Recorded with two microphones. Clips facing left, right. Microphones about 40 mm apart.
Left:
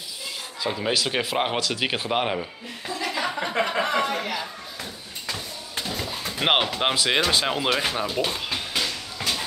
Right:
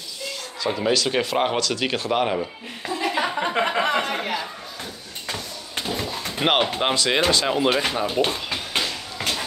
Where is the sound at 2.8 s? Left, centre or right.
Right.